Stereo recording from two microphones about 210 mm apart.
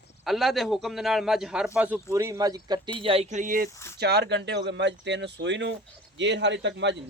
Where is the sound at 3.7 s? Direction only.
15° left (ahead or behind).